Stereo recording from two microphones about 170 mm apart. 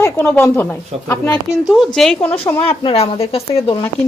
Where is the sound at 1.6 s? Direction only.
Centre (ahead or behind).